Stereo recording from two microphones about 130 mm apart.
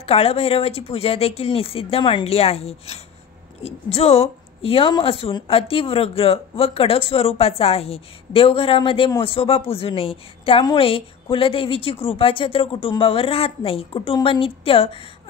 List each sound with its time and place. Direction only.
0.0 s speech: 50° left (ahead or behind)